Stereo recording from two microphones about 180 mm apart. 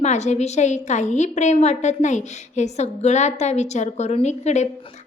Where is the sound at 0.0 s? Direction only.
40° left (ahead or behind).